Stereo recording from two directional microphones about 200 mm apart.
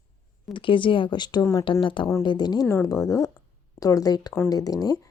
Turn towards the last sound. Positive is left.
turn(degrees=20)  # may be behind; listen again after turning